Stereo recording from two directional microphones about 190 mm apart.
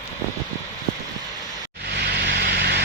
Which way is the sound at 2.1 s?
60° right (ahead or behind).